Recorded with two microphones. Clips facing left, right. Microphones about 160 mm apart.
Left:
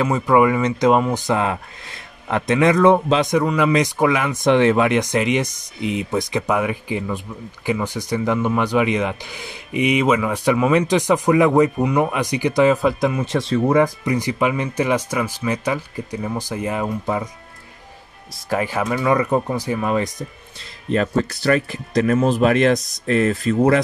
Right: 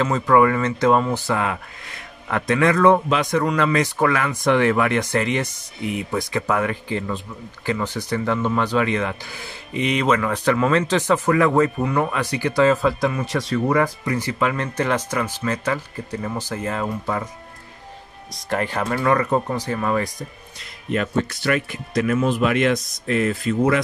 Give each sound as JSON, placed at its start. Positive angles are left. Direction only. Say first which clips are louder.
{"t": 0.0, "sound": "speech", "louder": "left 1 dB", "side_deg": 10}
{"t": 18.5, "sound": "speech", "louder": "left 2 dB", "side_deg": 10}
{"t": 20.9, "sound": "speech", "louder": "left 3 dB", "side_deg": 35}